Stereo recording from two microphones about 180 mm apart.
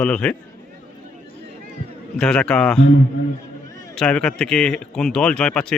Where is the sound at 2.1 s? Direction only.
5° left (ahead or behind).